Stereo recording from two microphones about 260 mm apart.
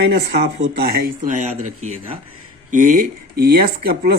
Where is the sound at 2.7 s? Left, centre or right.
Right.